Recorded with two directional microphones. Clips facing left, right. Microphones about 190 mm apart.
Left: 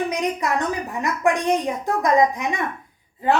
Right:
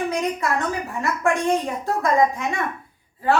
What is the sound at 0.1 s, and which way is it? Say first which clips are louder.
A woman's voice: even; 20° left (ahead or behind).